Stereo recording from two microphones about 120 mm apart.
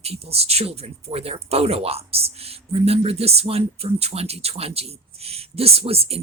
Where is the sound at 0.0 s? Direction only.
55° right (ahead or behind).